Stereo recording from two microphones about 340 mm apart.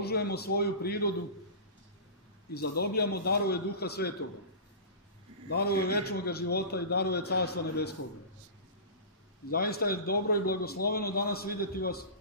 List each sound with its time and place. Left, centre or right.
0.0 s a man's voice: left
2.5 s a man's voice: left
5.5 s a man's voice: left
9.5 s a man's voice: left